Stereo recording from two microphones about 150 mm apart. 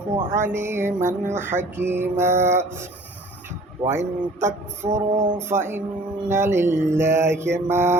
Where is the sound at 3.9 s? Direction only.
15° right (ahead or behind).